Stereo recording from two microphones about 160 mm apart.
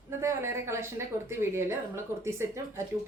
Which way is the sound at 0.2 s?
15° right (ahead or behind).